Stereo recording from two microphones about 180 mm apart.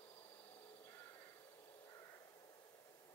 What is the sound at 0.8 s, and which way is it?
Crow, 15° left (ahead or behind).